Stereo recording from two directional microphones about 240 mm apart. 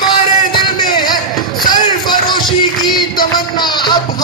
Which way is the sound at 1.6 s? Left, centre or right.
Centre.